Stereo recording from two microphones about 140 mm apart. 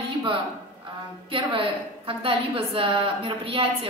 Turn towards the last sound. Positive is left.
turn(degrees=-40)  # may be behind; listen again after turning